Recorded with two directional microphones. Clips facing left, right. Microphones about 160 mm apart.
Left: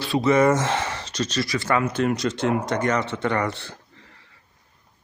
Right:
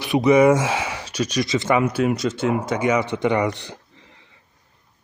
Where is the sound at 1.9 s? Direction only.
5° right (ahead or behind).